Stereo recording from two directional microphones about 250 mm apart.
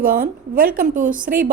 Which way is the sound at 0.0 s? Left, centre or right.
Right.